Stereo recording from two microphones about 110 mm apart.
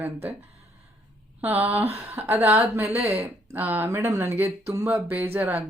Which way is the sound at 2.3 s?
70° right (ahead or behind).